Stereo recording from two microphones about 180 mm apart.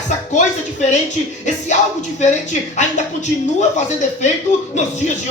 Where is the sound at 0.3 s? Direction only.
40° left (ahead or behind).